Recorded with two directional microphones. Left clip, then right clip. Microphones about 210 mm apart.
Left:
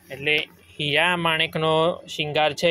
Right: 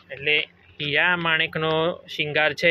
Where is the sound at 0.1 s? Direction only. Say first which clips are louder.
Right 1 dB; 30° left (ahead or behind).